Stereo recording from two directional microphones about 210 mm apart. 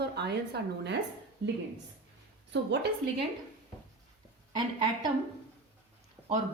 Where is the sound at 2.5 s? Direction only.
55° right (ahead or behind).